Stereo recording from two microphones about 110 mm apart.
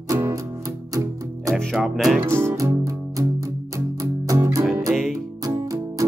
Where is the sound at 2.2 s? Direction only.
25° right (ahead or behind).